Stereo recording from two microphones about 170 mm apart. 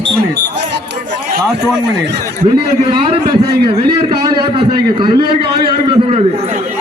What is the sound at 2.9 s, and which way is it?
Speech, 30° right (ahead or behind).